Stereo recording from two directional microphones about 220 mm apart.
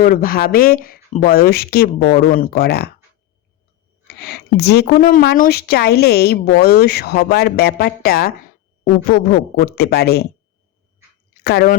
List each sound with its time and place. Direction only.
0.0 s a woman's voice: 40° left (ahead or behind)
4.1 s a woman's voice: 45° left (ahead or behind)
11.4 s a woman's voice: 45° left (ahead or behind)